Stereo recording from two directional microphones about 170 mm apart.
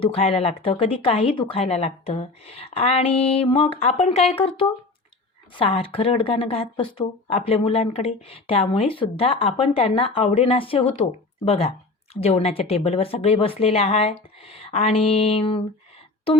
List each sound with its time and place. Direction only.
0.0 s speech: 35° left (ahead or behind)